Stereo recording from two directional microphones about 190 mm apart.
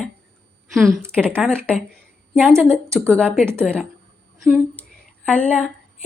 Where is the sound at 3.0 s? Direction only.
5° left (ahead or behind).